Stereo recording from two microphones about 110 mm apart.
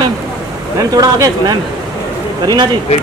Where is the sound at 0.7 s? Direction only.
35° right (ahead or behind).